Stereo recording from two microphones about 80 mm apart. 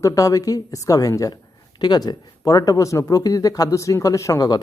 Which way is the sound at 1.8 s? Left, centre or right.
Left.